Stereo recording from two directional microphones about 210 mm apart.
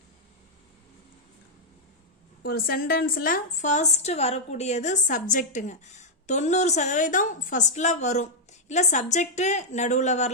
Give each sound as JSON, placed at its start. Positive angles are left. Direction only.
{"t": 2.4, "sound": "a woman's voice", "side_deg": 45}